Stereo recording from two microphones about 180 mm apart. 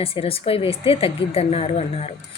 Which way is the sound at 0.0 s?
30° left (ahead or behind).